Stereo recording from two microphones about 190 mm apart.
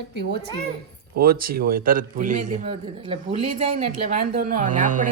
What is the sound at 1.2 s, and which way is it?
A man's voice, 50° right (ahead or behind).